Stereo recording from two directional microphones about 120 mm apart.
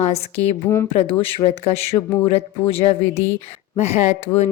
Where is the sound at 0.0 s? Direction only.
60° left (ahead or behind).